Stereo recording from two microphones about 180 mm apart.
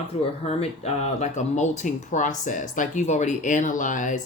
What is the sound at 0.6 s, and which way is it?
Speech, 35° left (ahead or behind).